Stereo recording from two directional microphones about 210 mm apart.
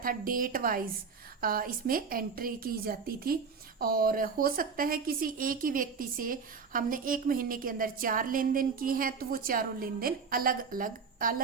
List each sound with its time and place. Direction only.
0.0 s a woman's voice: 40° right (ahead or behind)